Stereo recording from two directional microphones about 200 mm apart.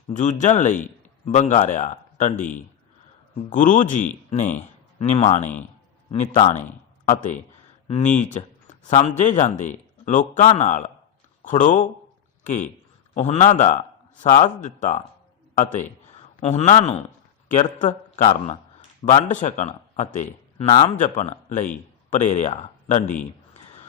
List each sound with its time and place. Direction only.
0.1 s a man's voice: 40° left (ahead or behind)
7.1 s a man's voice: 40° left (ahead or behind)